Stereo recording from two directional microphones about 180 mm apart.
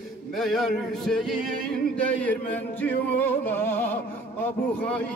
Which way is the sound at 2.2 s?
10° left (ahead or behind).